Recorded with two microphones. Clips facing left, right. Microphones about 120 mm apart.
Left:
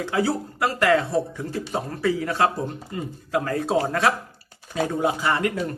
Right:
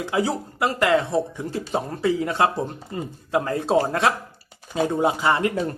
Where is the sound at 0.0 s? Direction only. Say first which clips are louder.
Even; 20° right (ahead or behind).